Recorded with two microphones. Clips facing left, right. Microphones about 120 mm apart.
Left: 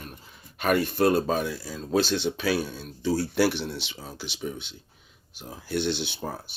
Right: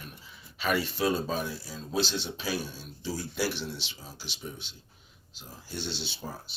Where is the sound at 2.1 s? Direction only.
65° left (ahead or behind).